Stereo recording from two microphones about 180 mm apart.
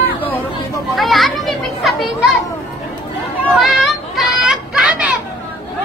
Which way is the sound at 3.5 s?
Centre (ahead or behind).